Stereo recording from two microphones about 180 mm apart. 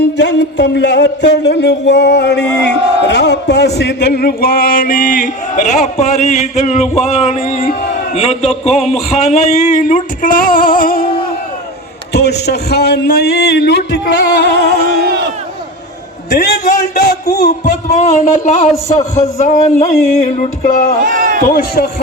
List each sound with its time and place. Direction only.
0.2 s a man's voice: 75° left (ahead or behind); by 11.1 s 50° left (ahead or behind)
12.1 s a man's voice: 65° left (ahead or behind)
16.9 s a man's voice: 60° left (ahead or behind); by 20.5 s 40° left (ahead or behind)
20.6 s a man's voice: 50° left (ahead or behind)
21.0 s a sound: 50° right (ahead or behind)
21.4 s a man's voice: 55° left (ahead or behind)